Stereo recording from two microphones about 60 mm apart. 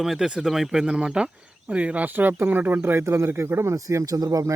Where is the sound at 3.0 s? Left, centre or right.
Right.